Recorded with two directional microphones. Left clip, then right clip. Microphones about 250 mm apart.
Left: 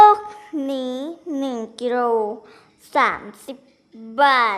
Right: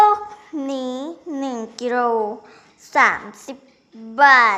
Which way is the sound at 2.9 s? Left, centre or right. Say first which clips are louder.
Right 3 dB; centre.